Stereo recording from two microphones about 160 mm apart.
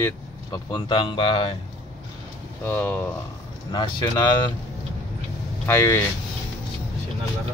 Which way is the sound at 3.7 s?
30° left (ahead or behind).